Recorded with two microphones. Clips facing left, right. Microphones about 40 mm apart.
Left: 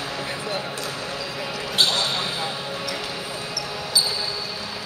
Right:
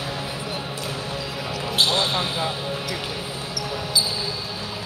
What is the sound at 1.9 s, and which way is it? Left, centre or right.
Basketball bounce, right.